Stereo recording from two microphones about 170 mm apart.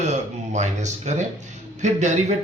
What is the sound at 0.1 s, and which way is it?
A man's voice, 45° right (ahead or behind).